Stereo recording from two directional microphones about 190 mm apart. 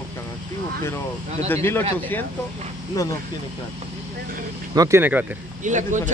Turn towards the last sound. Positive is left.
turn(degrees=-40)  # may be behind; listen again after turning